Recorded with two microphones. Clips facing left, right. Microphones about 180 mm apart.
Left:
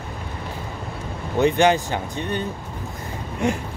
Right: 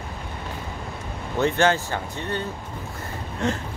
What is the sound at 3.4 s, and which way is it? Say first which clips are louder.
Speech: left 3 dB; 15° left (ahead or behind).